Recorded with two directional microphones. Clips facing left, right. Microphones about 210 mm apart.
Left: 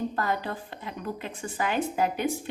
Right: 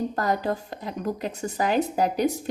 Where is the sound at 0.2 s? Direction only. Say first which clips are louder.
Right 4 dB; 40° right (ahead or behind).